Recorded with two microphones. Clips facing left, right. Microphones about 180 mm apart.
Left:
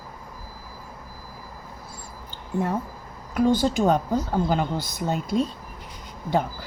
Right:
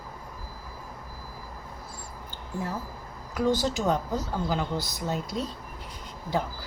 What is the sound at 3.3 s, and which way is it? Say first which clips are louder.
A woman's voice: left 5 dB; 55° left (ahead or behind).